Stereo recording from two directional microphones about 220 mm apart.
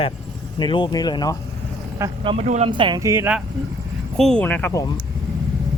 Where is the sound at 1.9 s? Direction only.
20° right (ahead or behind).